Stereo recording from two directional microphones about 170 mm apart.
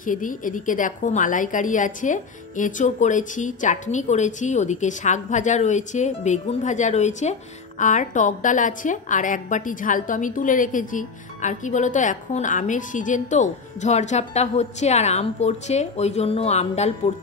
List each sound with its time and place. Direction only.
0.0 s a woman's voice: 50° left (ahead or behind)